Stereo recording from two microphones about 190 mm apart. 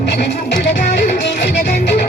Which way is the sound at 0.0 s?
65° left (ahead or behind).